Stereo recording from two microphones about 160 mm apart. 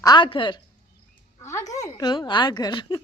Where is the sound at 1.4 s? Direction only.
20° left (ahead or behind).